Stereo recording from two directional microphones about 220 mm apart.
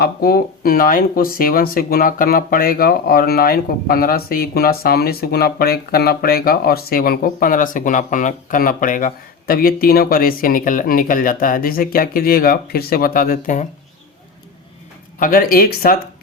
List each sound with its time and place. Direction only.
0.0 s speech: 45° left (ahead or behind)
15.2 s speech: 40° left (ahead or behind)